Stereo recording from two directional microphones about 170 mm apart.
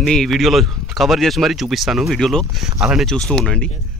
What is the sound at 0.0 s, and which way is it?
Speech, 5° left (ahead or behind).